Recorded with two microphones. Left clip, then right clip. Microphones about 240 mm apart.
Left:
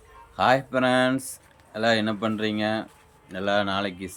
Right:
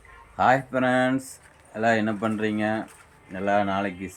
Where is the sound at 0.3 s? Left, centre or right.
Centre.